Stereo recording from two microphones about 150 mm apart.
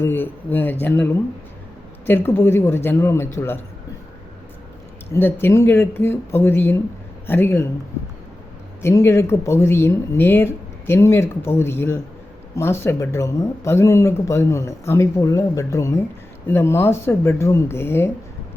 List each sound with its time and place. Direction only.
0.0 s speech: 15° left (ahead or behind)
5.1 s speech: 15° left (ahead or behind)
8.8 s speech: 20° left (ahead or behind)